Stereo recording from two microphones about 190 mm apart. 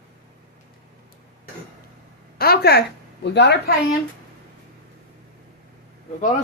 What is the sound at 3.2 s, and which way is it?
Speech, 65° left (ahead or behind).